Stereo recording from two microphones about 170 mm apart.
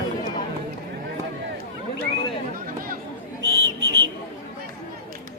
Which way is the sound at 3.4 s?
90° right.